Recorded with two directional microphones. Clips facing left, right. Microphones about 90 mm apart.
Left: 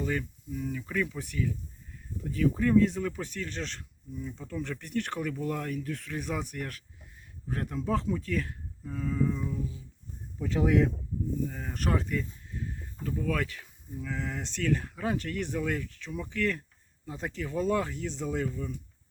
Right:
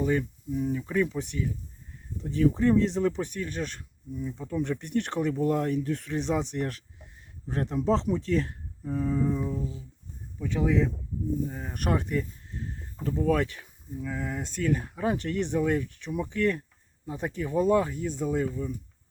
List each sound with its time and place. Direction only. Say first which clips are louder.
0.0 s speech: right 5 dB; 20° right (ahead or behind)
4.5 s speech: right 5 dB; 20° right (ahead or behind); by 9.8 s 35° right (ahead or behind)
10.6 s speech: even; 5° left (ahead or behind)
11.4 s speech: right 2 dB; 15° right (ahead or behind)
12.1 s speech: right 3 dB; 35° right (ahead or behind)
13.9 s speech: right 2 dB; 10° right (ahead or behind)
18.4 s speech: right 3 dB; 20° right (ahead or behind)